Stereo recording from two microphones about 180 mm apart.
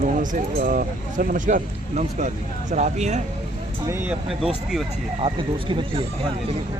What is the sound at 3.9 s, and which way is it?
Speech, 10° right (ahead or behind).